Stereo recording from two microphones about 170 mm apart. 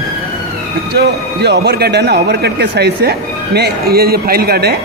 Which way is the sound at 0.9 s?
75° right (ahead or behind).